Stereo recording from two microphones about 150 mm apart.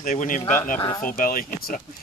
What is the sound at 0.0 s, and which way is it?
Speech, 60° left (ahead or behind).